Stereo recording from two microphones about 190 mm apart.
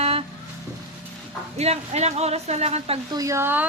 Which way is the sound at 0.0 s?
30° right (ahead or behind).